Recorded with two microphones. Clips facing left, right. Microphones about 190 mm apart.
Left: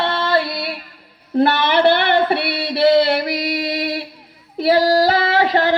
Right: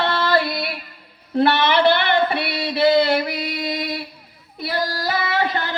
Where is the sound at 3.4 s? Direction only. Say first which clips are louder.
Left 4 dB; 70° left (ahead or behind).